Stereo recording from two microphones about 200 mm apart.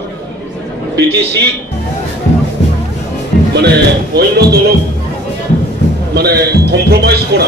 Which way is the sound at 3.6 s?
55° right (ahead or behind).